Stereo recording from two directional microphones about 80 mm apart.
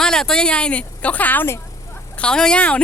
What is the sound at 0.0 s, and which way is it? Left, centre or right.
Speech, centre.